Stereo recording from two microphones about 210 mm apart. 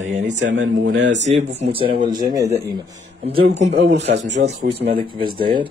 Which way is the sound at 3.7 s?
55° right (ahead or behind).